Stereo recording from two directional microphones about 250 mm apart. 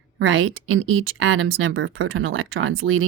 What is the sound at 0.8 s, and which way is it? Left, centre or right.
Speech, right.